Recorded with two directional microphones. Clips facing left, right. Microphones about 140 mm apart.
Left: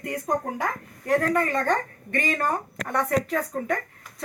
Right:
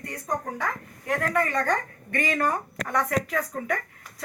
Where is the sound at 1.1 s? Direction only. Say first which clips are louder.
Left 3 dB; 25° left (ahead or behind).